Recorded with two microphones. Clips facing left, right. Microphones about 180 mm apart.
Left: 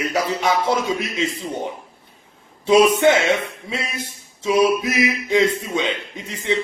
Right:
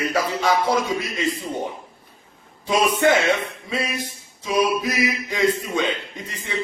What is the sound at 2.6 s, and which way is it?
Speech, 25° left (ahead or behind).